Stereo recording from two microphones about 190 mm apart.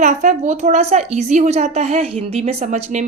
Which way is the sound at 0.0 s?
40° right (ahead or behind).